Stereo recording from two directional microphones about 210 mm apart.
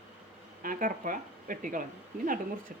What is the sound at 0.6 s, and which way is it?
A woman's voice, 40° right (ahead or behind).